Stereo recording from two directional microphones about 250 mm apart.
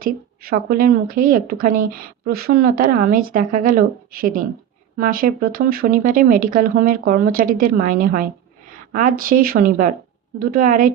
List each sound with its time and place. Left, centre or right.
0.0 s a woman's voice: right